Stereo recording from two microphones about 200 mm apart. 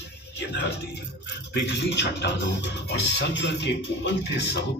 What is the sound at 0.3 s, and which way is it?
Speech, 55° left (ahead or behind).